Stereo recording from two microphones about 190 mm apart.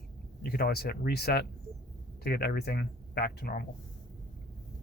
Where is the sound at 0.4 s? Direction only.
55° left (ahead or behind).